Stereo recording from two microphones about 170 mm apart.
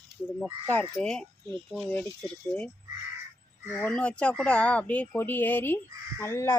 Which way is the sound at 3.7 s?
5° left (ahead or behind).